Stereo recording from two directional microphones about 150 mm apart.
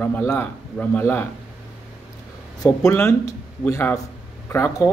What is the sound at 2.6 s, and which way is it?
A man's voice, 15° left (ahead or behind).